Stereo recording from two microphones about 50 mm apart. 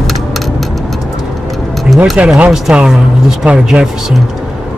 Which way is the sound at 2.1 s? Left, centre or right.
Right.